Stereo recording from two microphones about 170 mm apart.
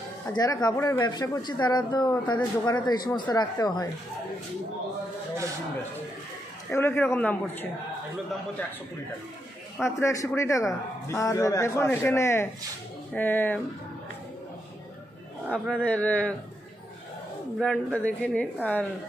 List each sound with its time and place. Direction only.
0.3 s speech: 25° left (ahead or behind)
6.7 s a man's voice: 15° left (ahead or behind)
9.9 s a man's voice: 15° left (ahead or behind)
15.5 s a man's voice: 5° left (ahead or behind)
17.6 s a man's voice: 5° left (ahead or behind)